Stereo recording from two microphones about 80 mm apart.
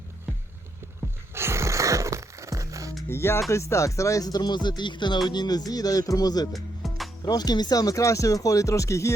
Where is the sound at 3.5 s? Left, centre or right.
Left.